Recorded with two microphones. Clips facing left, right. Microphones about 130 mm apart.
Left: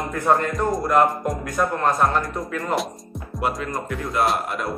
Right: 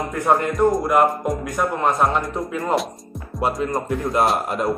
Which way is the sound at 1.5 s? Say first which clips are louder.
Even; 15° right (ahead or behind).